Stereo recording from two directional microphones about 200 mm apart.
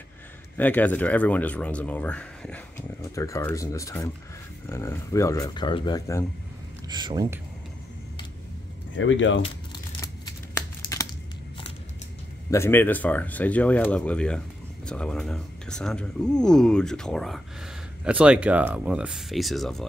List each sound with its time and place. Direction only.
0.6 s speech: 10° left (ahead or behind)
6.9 s speech: 20° right (ahead or behind)
8.9 s speech: 70° left (ahead or behind)
9.9 s a sound: 15° left (ahead or behind)
12.4 s speech: 15° left (ahead or behind)